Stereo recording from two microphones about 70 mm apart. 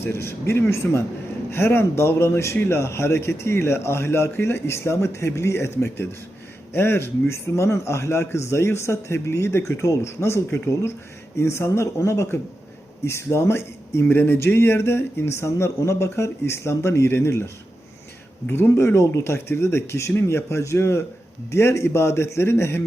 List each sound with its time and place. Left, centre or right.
0.0 s a man's voice: left
14.0 s a man's voice: left
18.7 s a man's voice: left